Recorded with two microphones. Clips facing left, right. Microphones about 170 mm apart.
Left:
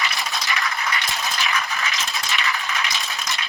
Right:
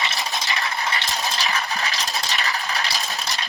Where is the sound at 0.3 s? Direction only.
35° right (ahead or behind).